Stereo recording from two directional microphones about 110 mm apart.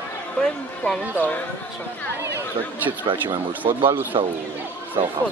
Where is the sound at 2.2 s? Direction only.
20° right (ahead or behind).